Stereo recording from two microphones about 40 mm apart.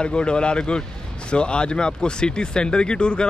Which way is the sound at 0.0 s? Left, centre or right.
Left.